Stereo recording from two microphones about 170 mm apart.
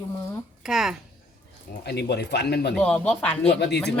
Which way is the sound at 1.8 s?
75° left (ahead or behind).